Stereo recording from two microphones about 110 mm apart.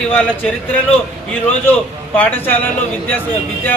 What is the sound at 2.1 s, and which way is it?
Speech, 15° left (ahead or behind).